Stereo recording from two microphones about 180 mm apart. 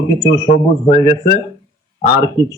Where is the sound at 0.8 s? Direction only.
30° left (ahead or behind).